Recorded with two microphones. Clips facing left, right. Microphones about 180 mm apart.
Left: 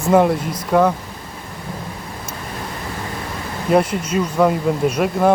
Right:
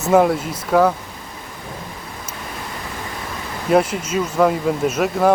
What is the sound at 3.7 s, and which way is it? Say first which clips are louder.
Speech: even; 5° right (ahead or behind).